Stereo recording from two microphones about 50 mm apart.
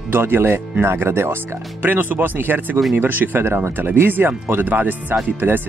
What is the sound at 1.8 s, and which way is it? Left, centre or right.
Speech, right.